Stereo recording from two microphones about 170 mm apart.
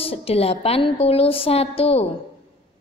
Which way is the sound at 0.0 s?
35° left (ahead or behind).